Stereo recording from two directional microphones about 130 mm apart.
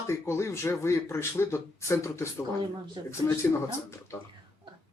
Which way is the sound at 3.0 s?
35° right (ahead or behind).